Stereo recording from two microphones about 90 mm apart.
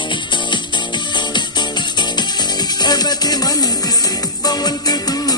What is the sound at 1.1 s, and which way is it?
Music, 55° left (ahead or behind).